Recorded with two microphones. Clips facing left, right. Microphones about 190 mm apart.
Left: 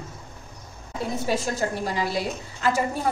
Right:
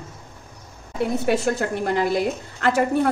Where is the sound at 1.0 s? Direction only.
65° right (ahead or behind).